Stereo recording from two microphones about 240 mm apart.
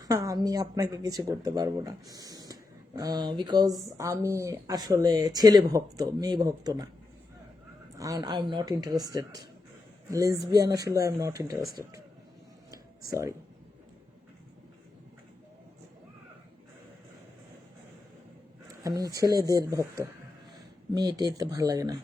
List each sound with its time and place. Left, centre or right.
0.0 s speech: centre
7.9 s speech: centre
12.7 s a sound: centre
18.8 s speech: centre